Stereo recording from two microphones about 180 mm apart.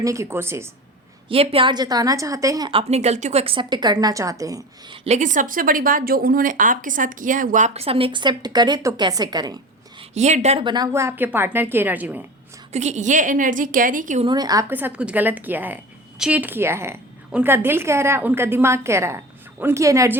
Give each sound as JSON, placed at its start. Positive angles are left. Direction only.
{"t": 0.0, "sound": "a woman's voice", "side_deg": -15}
{"t": 1.3, "sound": "a woman's voice", "side_deg": -30}
{"t": 2.9, "sound": "a woman's voice", "side_deg": -35}
{"t": 5.0, "sound": "a woman's voice", "side_deg": -40}
{"t": 10.0, "sound": "a woman's voice", "side_deg": -40}
{"t": 12.7, "sound": "a woman's voice", "side_deg": -40}
{"t": 14.3, "sound": "a woman's voice", "side_deg": -20}